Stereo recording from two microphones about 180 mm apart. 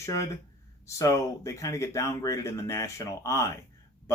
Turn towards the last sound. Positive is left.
turn(degrees=15)  # may be behind; listen again after turning